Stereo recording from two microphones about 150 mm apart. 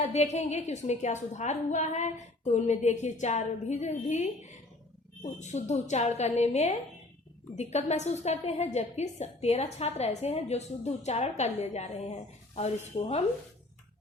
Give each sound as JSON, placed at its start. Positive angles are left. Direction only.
{"t": 0.0, "sound": "a woman's voice", "side_deg": 50}